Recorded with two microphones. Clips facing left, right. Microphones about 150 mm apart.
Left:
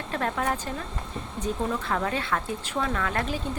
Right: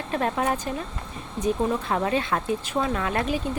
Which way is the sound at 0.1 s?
20° right (ahead or behind).